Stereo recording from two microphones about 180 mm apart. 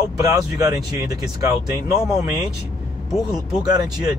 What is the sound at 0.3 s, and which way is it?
Speech, 20° right (ahead or behind).